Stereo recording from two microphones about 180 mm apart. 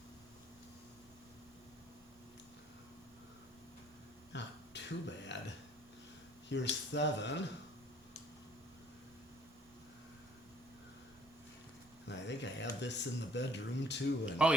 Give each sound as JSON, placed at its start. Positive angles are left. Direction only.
{"t": 4.3, "sound": "a sound", "side_deg": 75}
{"t": 6.5, "sound": "speech", "side_deg": 80}
{"t": 12.0, "sound": "speech", "side_deg": 75}
{"t": 14.3, "sound": "speech", "side_deg": -5}